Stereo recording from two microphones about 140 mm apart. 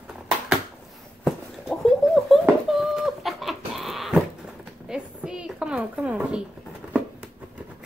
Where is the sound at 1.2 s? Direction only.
Centre (ahead or behind).